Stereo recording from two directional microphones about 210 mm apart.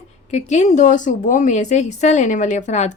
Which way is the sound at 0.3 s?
35° left (ahead or behind).